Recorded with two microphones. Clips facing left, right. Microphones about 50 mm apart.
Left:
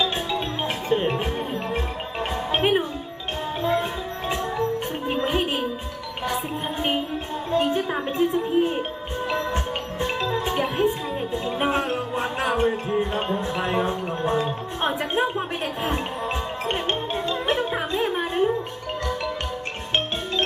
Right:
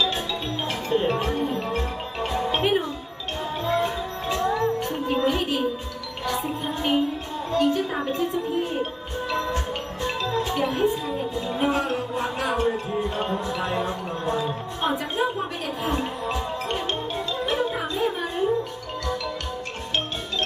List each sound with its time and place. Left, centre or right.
0.8 s music: left
7.5 s speech: left
10.0 s music: left
11.4 s speech: left
15.8 s music: left